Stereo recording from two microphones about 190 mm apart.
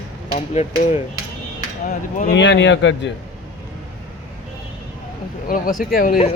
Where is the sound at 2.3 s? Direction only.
65° left (ahead or behind).